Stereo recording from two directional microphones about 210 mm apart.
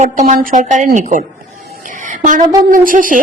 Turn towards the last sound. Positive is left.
turn(degrees=-40)  # may be behind; listen again after turning